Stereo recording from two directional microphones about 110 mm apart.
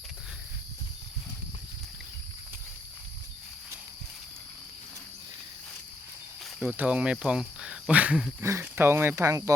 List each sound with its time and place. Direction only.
6.7 s speech: 10° right (ahead or behind)
8.4 s speech: 25° right (ahead or behind)